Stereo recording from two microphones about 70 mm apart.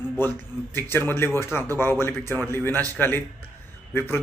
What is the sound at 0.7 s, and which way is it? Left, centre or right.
A man's voice, left.